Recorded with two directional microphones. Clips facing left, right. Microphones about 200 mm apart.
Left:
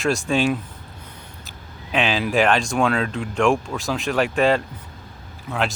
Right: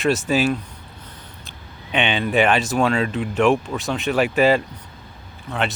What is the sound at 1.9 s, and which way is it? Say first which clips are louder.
Speech: right 1 dB; centre (ahead or behind).